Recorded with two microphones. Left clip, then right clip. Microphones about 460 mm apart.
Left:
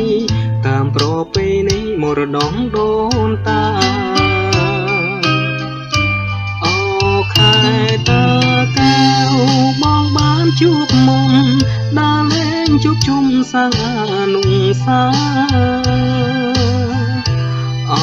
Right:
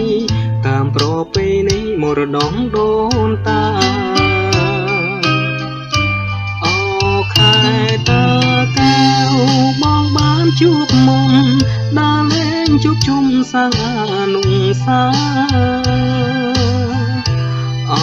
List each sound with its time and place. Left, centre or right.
0.7 s music: centre
2.0 s music: right; by 5.0 s centre
6.6 s music: left; by 11.6 s right
11.9 s music: right; by 14.0 s centre
14.1 s music: left